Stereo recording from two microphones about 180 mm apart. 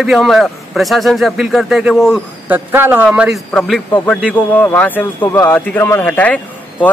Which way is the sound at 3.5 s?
5° left (ahead or behind).